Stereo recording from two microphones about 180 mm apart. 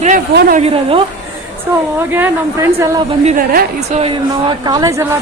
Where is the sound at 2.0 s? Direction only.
15° right (ahead or behind).